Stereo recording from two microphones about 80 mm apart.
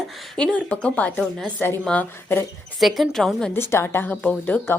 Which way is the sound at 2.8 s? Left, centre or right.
Centre.